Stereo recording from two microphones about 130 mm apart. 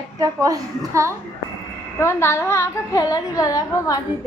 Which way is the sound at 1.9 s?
20° left (ahead or behind).